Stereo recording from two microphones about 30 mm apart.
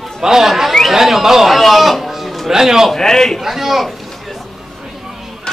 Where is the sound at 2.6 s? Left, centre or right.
Centre.